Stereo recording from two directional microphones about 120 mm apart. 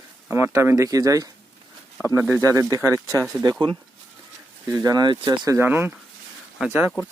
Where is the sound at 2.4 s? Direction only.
25° right (ahead or behind).